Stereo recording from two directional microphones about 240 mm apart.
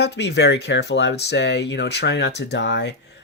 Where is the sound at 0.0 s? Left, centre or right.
Left.